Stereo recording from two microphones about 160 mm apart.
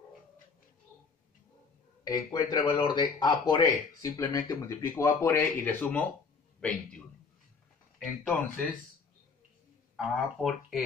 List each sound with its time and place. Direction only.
2.0 s speech: 20° left (ahead or behind); by 7.0 s 5° left (ahead or behind)
8.2 s speech: 10° left (ahead or behind)
9.9 s speech: centre (ahead or behind)